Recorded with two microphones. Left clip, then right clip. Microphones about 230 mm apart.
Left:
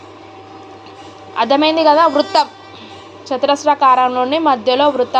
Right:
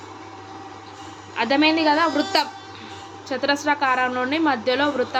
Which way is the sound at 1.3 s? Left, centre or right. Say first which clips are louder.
Left 6 dB; centre.